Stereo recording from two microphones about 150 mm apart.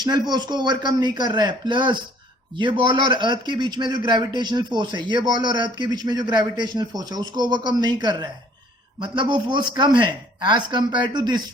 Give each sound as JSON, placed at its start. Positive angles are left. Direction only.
{"t": 0.0, "sound": "a man's voice", "side_deg": -30}